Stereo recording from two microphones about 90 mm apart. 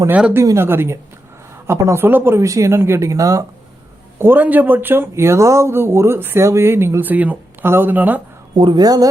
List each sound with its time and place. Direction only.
0.1 s speech: 10° right (ahead or behind)
0.5 s speech: 25° right (ahead or behind)
4.2 s speech: 20° right (ahead or behind)
8.5 s speech: 55° right (ahead or behind)